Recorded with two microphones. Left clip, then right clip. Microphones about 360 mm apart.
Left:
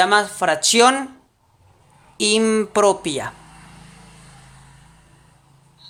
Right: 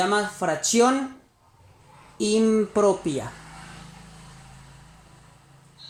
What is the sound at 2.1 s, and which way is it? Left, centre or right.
Speech, left.